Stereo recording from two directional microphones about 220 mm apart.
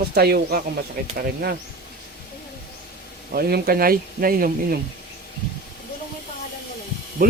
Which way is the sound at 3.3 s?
45° right (ahead or behind).